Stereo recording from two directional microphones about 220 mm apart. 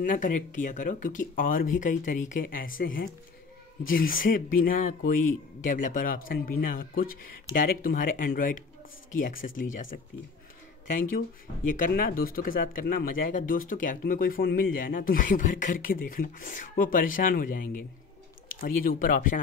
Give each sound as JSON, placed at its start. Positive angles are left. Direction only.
{"t": 0.0, "sound": "speech", "side_deg": 35}
{"t": 10.9, "sound": "speech", "side_deg": 35}